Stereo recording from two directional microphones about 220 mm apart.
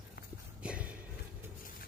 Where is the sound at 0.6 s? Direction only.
5° right (ahead or behind).